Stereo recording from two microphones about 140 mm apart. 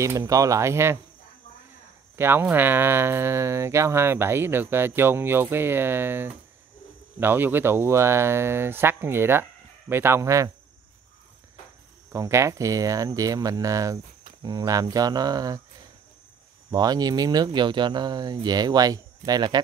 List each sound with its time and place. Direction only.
0.0 s speech: 20° right (ahead or behind)
2.1 s speech: 15° right (ahead or behind)
12.1 s speech: 20° right (ahead or behind)
16.7 s speech: 30° right (ahead or behind)